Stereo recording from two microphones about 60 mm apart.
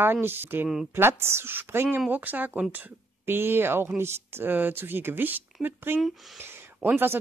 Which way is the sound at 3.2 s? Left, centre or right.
Right.